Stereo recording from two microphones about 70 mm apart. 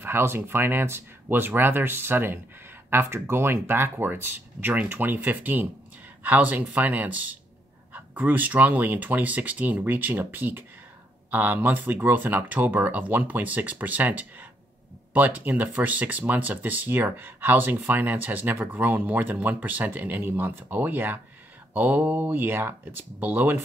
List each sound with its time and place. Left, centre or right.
0.0 s speech: right